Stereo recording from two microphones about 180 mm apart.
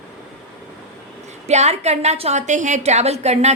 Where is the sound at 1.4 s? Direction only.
35° right (ahead or behind).